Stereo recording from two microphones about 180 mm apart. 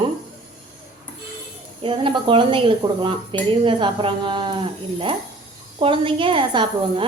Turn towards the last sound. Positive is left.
turn(degrees=-25)  # may be behind; listen again after turning